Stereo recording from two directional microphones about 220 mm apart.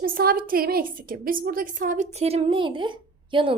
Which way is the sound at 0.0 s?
40° right (ahead or behind).